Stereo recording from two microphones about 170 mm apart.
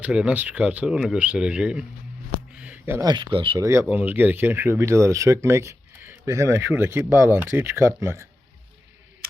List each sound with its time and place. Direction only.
0.0 s speech: 5° right (ahead or behind)
2.6 s a sound: 10° right (ahead or behind)
3.1 s speech: 30° right (ahead or behind)
3.8 s speech: 10° right (ahead or behind)